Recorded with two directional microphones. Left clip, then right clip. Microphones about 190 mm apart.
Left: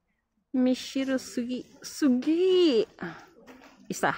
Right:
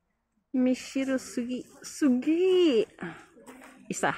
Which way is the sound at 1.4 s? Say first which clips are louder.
Left 1 dB; 20° left (ahead or behind).